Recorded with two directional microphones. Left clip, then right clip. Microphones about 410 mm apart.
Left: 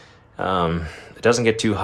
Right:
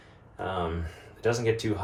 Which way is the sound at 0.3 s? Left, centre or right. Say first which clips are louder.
Left 10 dB; centre.